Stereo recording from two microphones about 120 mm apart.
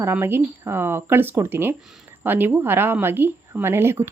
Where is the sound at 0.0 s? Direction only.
20° right (ahead or behind).